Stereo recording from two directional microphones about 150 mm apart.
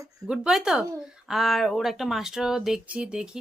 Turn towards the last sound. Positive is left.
turn(degrees=-5)  # may be behind; listen again after turning